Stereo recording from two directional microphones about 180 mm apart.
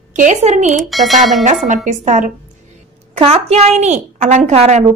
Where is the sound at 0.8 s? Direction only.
Centre (ahead or behind).